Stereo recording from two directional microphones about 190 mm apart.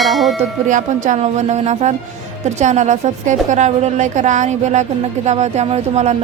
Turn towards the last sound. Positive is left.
turn(degrees=-35)  # may be behind; listen again after turning